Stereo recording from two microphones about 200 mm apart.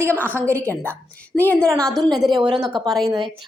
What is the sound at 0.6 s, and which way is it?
A woman's voice, 5° left (ahead or behind).